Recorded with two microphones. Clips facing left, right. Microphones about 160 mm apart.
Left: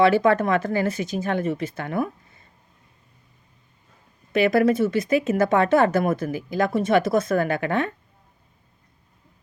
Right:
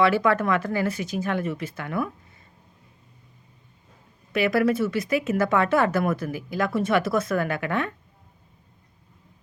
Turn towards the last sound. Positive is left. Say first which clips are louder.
# left 3 dB
turn(degrees=25)  # may be behind; listen again after turning